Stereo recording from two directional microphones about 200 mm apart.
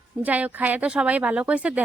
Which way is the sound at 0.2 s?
5° right (ahead or behind).